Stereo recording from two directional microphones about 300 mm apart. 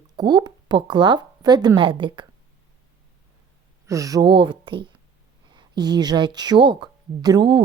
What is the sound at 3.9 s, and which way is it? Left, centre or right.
A woman's voice, centre.